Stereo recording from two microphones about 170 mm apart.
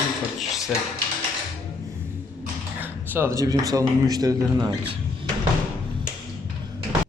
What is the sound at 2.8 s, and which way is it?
A man's voice, 15° right (ahead or behind).